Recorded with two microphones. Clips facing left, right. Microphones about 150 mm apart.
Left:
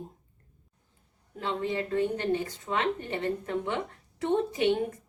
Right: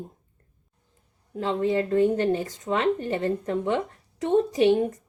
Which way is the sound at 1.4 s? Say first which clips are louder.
Right 7 dB; 40° right (ahead or behind).